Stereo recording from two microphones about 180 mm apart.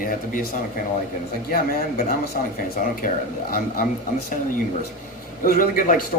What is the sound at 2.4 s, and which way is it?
Speech, 50° left (ahead or behind).